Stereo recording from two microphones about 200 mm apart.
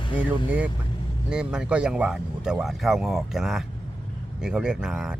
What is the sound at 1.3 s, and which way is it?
Speech, 5° right (ahead or behind).